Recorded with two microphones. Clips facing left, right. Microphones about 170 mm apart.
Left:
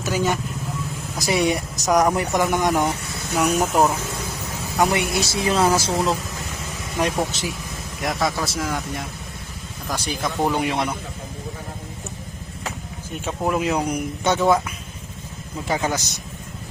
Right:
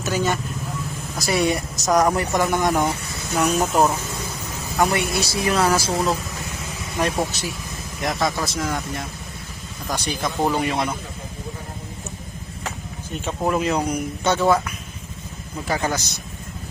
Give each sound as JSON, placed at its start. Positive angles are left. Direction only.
{"t": 0.0, "sound": "speech", "side_deg": 10}
{"t": 8.0, "sound": "speech", "side_deg": 5}
{"t": 13.2, "sound": "speech", "side_deg": 5}
{"t": 15.6, "sound": "speech", "side_deg": 15}